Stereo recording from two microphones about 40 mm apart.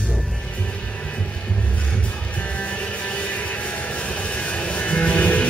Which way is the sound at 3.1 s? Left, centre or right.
Left.